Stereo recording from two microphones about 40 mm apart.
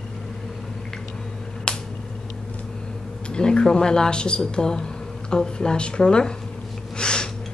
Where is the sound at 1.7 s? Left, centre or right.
Left.